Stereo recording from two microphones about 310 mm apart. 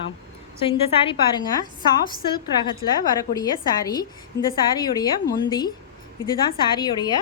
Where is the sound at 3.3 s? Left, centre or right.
Centre.